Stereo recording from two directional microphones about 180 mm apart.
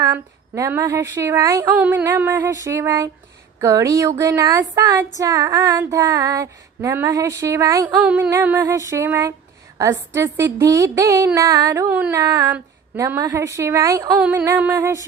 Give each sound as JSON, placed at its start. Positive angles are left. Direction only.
{"t": 0.0, "sound": "female singing", "side_deg": -20}
{"t": 3.6, "sound": "carnatic music", "side_deg": -20}
{"t": 4.2, "sound": "female singing", "side_deg": -20}
{"t": 7.9, "sound": "female singing", "side_deg": -10}
{"t": 11.3, "sound": "carnatic music", "side_deg": -20}
{"t": 12.5, "sound": "female singing", "side_deg": -10}